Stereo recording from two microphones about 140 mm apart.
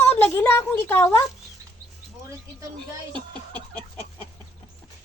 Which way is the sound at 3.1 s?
35° right (ahead or behind).